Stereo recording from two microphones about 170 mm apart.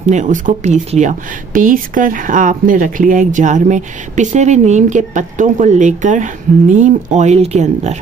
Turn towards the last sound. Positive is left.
turn(degrees=-40)  # may be behind; listen again after turning